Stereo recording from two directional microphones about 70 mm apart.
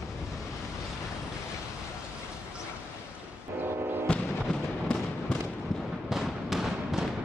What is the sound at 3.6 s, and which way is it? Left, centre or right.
Music, right.